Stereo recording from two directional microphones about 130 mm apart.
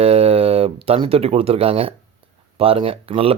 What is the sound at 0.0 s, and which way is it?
A man's voice, 50° right (ahead or behind).